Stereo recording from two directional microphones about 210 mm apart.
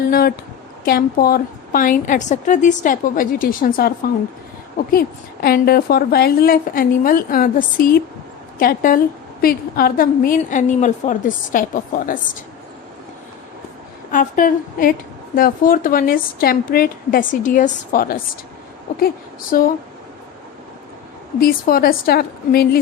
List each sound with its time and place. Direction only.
0.1 s a woman's voice: 45° left (ahead or behind)
14.1 s a woman's voice: 40° left (ahead or behind)
21.4 s a woman's voice: 45° left (ahead or behind)